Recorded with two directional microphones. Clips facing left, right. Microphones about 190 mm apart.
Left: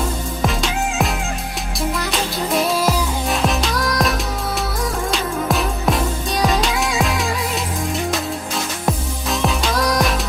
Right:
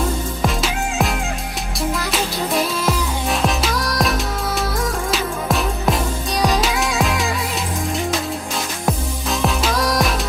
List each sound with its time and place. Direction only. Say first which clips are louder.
0.4 s music: left 1 dB; centre (ahead or behind)
2.1 s music: left 1 dB; centre (ahead or behind)
5.1 s music: left 1 dB; centre (ahead or behind)
8.9 s music: right 1 dB; centre (ahead or behind)